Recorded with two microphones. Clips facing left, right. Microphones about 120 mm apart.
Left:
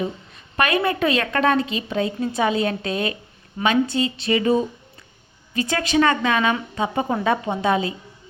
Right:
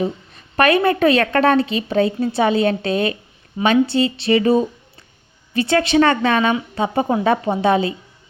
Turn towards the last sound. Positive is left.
turn(degrees=-30)  # may be behind; listen again after turning